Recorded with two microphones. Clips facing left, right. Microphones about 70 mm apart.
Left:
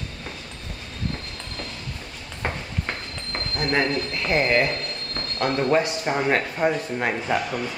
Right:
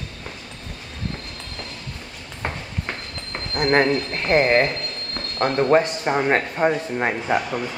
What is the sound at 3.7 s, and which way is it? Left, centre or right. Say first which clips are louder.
Speech: right 5 dB; right.